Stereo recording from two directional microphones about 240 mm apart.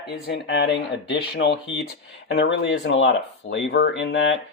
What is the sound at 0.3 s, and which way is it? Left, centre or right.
Speech, left.